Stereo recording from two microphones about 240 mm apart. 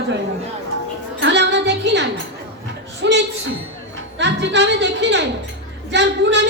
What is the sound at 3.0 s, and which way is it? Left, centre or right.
A woman's voice, right.